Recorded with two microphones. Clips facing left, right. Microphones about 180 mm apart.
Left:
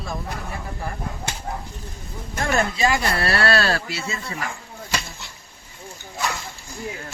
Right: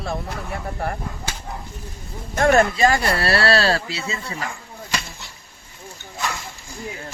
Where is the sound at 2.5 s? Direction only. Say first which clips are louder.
Right 3 dB; 45° right (ahead or behind); by 4.5 s 20° right (ahead or behind).